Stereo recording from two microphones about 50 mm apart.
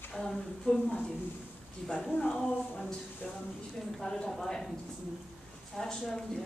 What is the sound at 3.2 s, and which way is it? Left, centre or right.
Speech, left.